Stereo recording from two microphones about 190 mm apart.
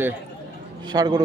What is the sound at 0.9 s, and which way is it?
Speech, 20° right (ahead or behind).